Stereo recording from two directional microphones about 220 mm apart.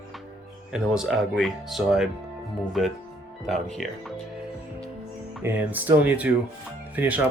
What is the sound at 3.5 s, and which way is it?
Speech, centre (ahead or behind).